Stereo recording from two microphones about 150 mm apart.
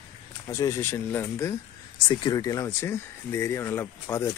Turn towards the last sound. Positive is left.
turn(degrees=15)  # may be behind; listen again after turning